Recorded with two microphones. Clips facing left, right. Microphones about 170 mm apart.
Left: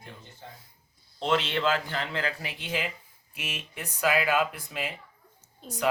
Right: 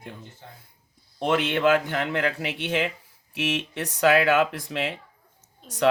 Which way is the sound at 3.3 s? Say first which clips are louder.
Right 11 dB; 85° right.